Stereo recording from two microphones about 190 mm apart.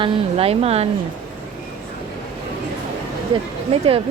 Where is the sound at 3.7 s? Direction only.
30° right (ahead or behind).